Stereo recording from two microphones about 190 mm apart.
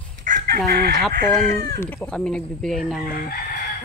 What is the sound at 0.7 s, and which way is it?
Chicken, 55° right (ahead or behind).